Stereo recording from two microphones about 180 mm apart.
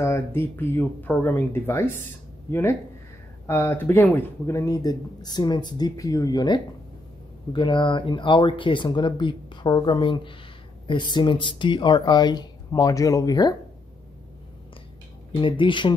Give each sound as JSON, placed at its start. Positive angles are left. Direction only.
{"t": 0.0, "sound": "speech", "side_deg": 15}
{"t": 3.4, "sound": "speech", "side_deg": 15}
{"t": 15.4, "sound": "speech", "side_deg": 25}